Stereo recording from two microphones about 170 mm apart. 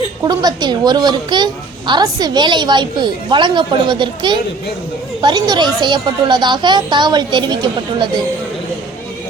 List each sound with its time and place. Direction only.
0.3 s speech: 25° right (ahead or behind)